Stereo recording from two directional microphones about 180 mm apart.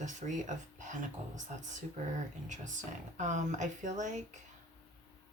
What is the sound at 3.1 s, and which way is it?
Speech, 40° right (ahead or behind).